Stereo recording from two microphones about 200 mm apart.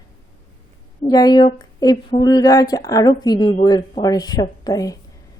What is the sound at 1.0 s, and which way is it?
Speech, 20° left (ahead or behind).